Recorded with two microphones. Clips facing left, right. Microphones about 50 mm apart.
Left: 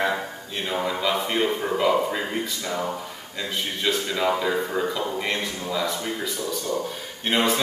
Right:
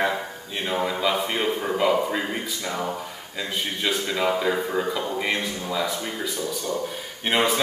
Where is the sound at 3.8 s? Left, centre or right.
Centre.